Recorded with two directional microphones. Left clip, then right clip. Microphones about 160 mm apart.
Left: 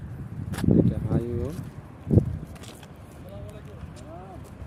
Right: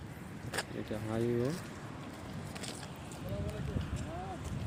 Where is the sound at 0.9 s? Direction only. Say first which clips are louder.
Left 4 dB; centre (ahead or behind).